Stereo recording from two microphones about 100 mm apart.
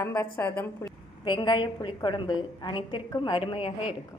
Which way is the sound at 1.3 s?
50° left (ahead or behind).